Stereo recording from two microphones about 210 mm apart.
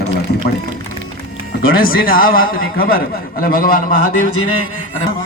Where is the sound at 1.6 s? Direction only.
45° left (ahead or behind).